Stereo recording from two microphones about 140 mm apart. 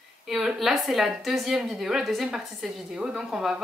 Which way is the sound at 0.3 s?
5° right (ahead or behind).